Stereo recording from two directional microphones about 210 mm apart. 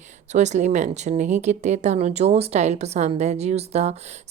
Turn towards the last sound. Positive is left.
turn(degrees=-30)  # may be behind; listen again after turning